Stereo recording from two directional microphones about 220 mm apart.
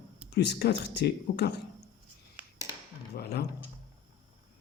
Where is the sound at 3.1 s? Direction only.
45° left (ahead or behind).